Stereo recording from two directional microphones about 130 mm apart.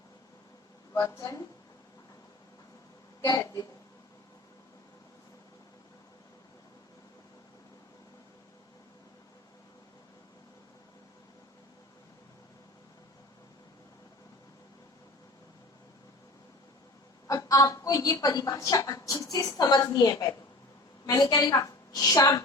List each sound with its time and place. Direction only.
1.0 s a woman's voice: 25° left (ahead or behind)
3.2 s speech: 25° left (ahead or behind)
17.2 s a woman's voice: 25° left (ahead or behind)